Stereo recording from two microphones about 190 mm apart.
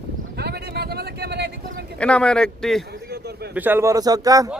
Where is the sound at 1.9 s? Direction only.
5° left (ahead or behind).